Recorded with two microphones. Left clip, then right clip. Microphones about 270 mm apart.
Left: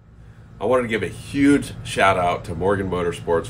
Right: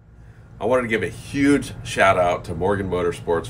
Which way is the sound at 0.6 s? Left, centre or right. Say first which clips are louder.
Even; centre.